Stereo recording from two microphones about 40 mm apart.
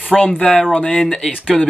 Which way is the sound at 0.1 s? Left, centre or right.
Centre.